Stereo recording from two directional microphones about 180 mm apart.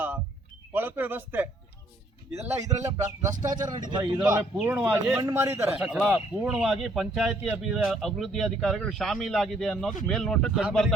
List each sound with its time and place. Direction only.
0.7 s a man's voice: 10° right (ahead or behind)
2.5 s speech: 15° right (ahead or behind)
3.3 s speech: 45° right (ahead or behind)
3.8 s a man's voice: 25° right (ahead or behind)
5.8 s speech: 5° right (ahead or behind)